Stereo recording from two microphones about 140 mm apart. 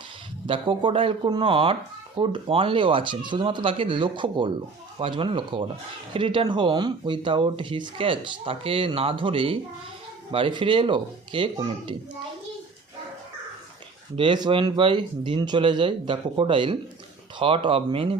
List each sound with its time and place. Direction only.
0.4 s speech: 40° right (ahead or behind)
14.2 s speech: 35° right (ahead or behind)